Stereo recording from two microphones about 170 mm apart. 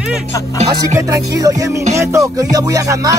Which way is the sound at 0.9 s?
20° right (ahead or behind).